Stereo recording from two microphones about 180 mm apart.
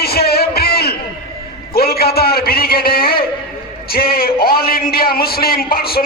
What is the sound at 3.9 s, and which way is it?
A man's voice, 55° left (ahead or behind).